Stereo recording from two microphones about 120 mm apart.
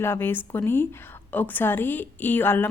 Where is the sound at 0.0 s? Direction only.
20° left (ahead or behind).